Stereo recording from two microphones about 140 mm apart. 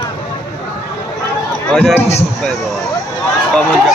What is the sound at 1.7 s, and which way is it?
Speech, 5° left (ahead or behind).